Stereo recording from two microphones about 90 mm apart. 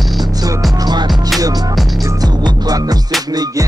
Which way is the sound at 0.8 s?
50° right (ahead or behind).